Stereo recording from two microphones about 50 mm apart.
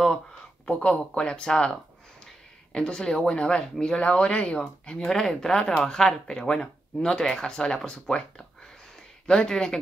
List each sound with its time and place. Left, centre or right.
0.7 s speech: centre
5.1 s speech: centre